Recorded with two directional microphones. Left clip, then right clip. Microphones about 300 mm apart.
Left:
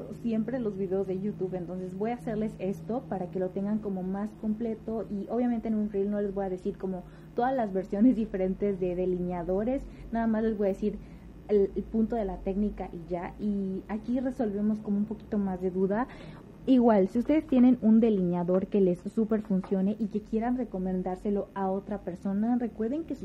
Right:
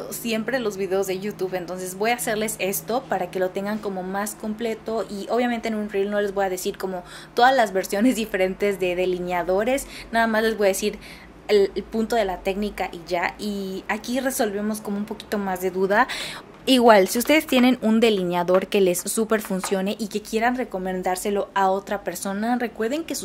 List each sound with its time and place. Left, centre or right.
0.2 s a woman's voice: centre
1.5 s a woman's voice: centre
2.0 s a woman's voice: centre